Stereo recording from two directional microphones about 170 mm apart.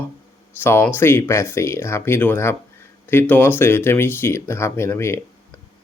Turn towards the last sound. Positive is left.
turn(degrees=15)  # may be behind; listen again after turning